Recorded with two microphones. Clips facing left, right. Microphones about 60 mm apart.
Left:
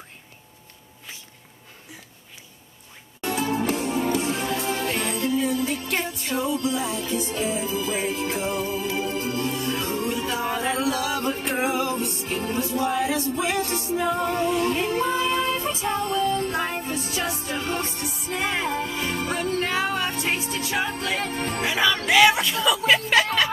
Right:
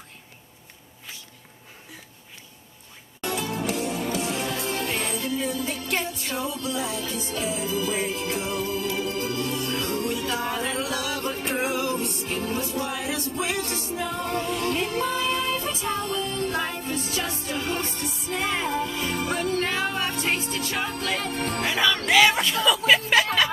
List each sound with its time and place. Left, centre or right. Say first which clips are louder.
3.2 s music: left 4 dB; left
19.0 s music: even; left
19.6 s music: left 2 dB; centre
20.8 s music: left 2 dB; left
21.5 s music: left 1 dB; centre